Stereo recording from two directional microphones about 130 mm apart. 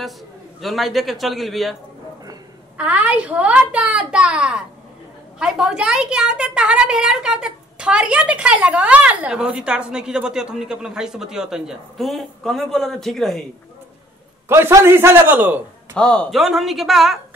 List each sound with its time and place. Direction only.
0.6 s a woman's voice: centre (ahead or behind)
2.8 s a child's voice: 10° right (ahead or behind)
14.5 s a man's voice: 20° right (ahead or behind)
15.9 s a woman's voice: 5° left (ahead or behind)